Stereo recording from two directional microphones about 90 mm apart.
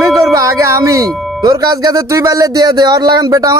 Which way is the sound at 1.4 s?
45° right (ahead or behind).